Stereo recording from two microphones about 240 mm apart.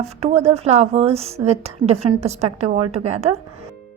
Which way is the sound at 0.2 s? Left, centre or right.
Right.